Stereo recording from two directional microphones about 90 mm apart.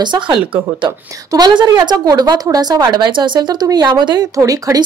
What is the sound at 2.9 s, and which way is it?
Speech, 60° right (ahead or behind).